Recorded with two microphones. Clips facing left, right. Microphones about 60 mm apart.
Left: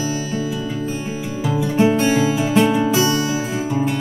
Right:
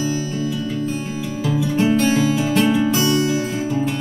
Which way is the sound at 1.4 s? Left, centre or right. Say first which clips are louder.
Left 2 dB; centre.